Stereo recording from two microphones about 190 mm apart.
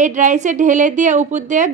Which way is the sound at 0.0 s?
40° right (ahead or behind).